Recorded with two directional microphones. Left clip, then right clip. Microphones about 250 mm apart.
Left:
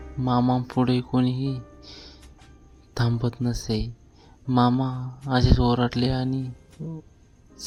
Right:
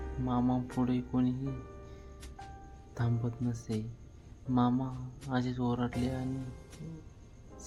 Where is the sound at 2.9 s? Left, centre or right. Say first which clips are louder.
Left 10 dB; left.